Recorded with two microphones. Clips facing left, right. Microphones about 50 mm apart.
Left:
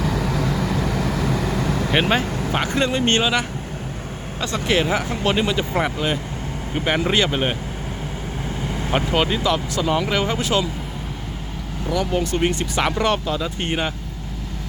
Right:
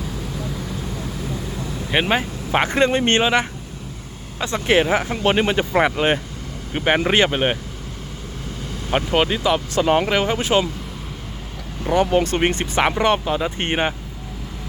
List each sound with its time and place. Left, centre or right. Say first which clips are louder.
0.0 s vehicle: left 7 dB; left
1.9 s speech: right 1 dB; centre
2.2 s vehicle: left 6 dB; left
2.5 s speech: right 5 dB; right
6.7 s speech: right 3 dB; right
7.3 s speech: right 2 dB; centre
9.1 s speech: right 2 dB; centre
9.7 s speech: right 4 dB; right
10.1 s speech: right 2 dB; centre
11.9 s speech: right 4 dB; right
12.8 s speech: right 3 dB; right